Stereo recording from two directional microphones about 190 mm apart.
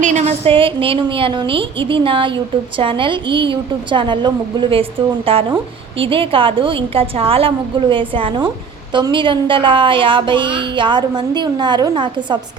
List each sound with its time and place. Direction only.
0.0 s a woman's voice: 40° right (ahead or behind); by 12.4 s 25° right (ahead or behind)